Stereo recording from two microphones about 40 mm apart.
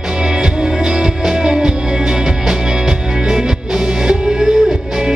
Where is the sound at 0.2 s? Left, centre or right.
Right.